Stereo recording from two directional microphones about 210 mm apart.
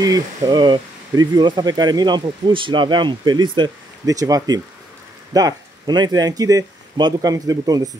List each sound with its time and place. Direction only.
0.0 s speech: 15° right (ahead or behind)